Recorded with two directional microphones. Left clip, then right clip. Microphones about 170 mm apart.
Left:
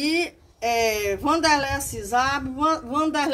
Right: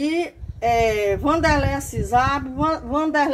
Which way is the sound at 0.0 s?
15° right (ahead or behind).